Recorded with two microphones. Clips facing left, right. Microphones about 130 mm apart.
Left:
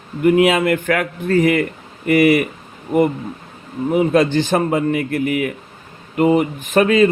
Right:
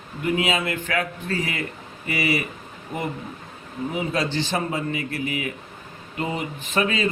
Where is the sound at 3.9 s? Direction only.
55° left (ahead or behind).